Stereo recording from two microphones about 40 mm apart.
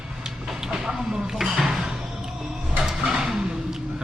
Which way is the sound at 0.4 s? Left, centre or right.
Centre.